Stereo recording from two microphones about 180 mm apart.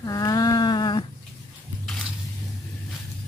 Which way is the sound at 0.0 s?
20° left (ahead or behind).